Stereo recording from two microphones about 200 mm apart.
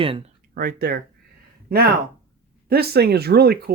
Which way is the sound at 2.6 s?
50° right (ahead or behind).